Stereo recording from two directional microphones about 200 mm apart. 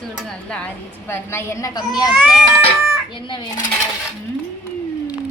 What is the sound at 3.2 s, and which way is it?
Speech, 25° left (ahead or behind).